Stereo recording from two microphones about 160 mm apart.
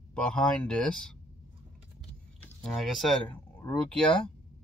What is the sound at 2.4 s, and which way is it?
Speech, 5° left (ahead or behind).